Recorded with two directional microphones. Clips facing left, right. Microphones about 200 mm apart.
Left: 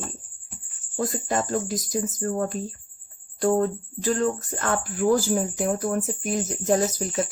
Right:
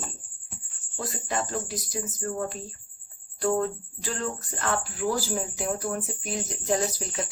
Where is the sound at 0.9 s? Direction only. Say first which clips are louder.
Left 6 dB; 45° left (ahead or behind).